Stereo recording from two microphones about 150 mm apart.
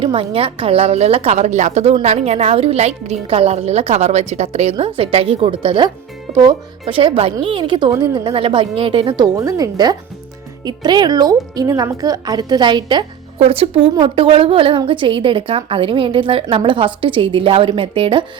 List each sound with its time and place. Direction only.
0.0 s a woman's voice: 35° right (ahead or behind)